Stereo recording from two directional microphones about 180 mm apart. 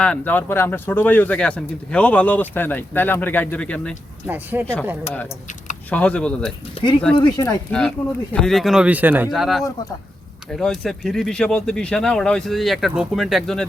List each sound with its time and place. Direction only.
0.0 s speech: 10° left (ahead or behind)
4.3 s speech: 10° right (ahead or behind)
4.6 s speech: 5° left (ahead or behind)
5.9 s speech: 5° left (ahead or behind)
7.2 s speech: 20° left (ahead or behind)
7.7 s speech: 5° left (ahead or behind)